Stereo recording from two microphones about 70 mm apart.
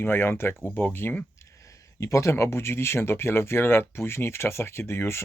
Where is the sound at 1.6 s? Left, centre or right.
Left.